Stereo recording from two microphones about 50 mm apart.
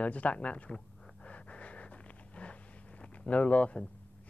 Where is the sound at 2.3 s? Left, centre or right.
Left.